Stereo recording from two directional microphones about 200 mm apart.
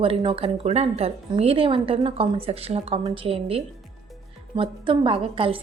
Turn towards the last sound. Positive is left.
turn(degrees=-25)  # may be behind; listen again after turning